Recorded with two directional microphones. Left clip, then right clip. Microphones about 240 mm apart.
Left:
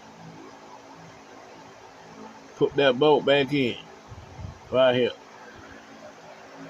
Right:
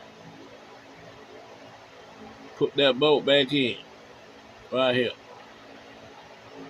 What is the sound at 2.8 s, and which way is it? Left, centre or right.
Speech, left.